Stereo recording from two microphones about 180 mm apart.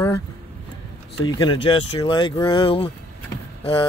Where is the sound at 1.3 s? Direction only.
25° left (ahead or behind).